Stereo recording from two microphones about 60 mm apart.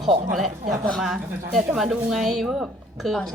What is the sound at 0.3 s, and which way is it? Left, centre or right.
A woman's voice, centre.